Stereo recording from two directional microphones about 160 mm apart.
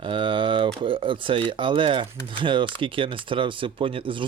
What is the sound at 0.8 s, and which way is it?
Speech, 30° right (ahead or behind).